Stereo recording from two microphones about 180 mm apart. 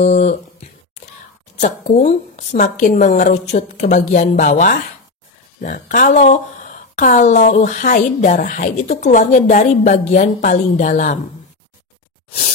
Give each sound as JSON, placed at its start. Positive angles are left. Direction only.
{"t": 0.0, "sound": "speech", "side_deg": 40}
{"t": 1.6, "sound": "speech", "side_deg": 45}